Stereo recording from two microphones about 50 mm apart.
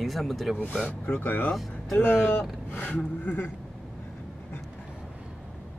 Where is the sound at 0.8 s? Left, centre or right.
Left.